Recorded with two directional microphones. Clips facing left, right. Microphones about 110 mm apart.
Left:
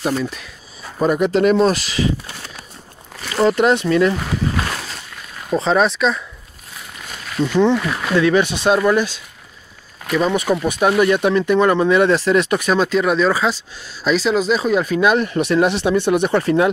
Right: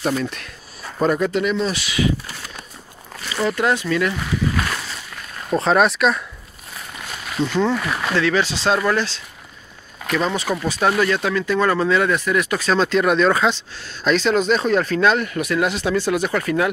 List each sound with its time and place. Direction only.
0.0 s speech: 5° left (ahead or behind)
1.3 s speech: 45° left (ahead or behind)
3.3 s speech: 25° left (ahead or behind)
5.5 s speech: centre (ahead or behind)
7.5 s speech: 15° left (ahead or behind)
7.8 s speech: 5° left (ahead or behind)
8.2 s speech: 20° left (ahead or behind)
15.2 s speech: 25° left (ahead or behind)